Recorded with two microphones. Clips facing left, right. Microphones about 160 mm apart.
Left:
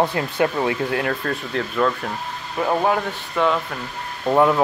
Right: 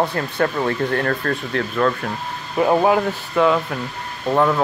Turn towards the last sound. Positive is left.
turn(degrees=10)  # may be behind; listen again after turning